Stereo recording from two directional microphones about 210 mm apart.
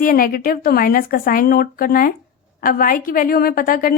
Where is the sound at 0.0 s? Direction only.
45° left (ahead or behind).